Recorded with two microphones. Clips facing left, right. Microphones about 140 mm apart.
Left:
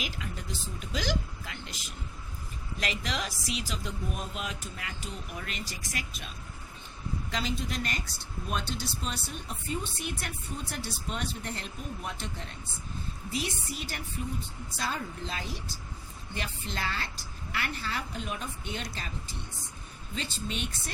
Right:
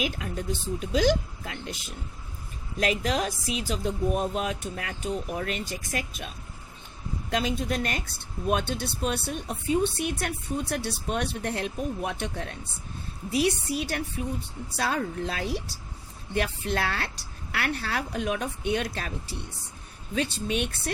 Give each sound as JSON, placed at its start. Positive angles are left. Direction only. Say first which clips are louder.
{"t": 0.0, "sound": "speech", "louder": "right 8 dB", "side_deg": -45}
{"t": 2.8, "sound": "a woman's voice", "louder": "right 8 dB", "side_deg": -40}